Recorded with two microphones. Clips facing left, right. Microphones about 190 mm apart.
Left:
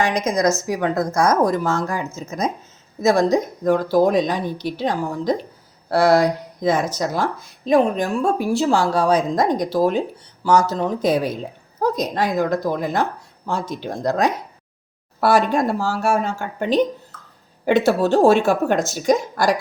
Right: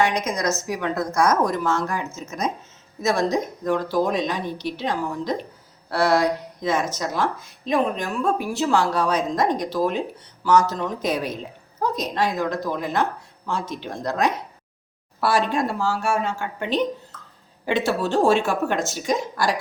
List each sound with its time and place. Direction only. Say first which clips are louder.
0.7 s a woman's voice: left 4 dB; 40° left (ahead or behind)
3.2 s speech: left 4 dB; 15° left (ahead or behind)
3.6 s a woman's voice: left 6 dB; 35° left (ahead or behind)